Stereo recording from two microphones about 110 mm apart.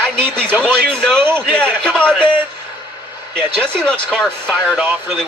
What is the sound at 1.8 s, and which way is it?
Speech, 10° left (ahead or behind).